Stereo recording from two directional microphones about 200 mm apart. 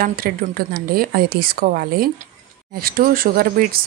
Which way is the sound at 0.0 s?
45° right (ahead or behind).